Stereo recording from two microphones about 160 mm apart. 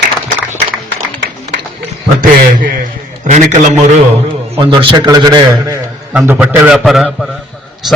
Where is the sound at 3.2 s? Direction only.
45° right (ahead or behind).